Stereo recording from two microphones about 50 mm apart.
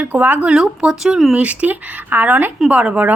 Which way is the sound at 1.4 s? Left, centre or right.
Right.